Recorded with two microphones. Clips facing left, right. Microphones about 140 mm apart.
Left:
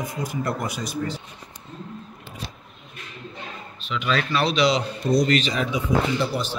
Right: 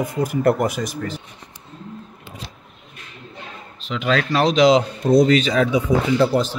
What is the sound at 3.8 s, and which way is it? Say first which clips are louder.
Speech: right 4 dB; 90° right.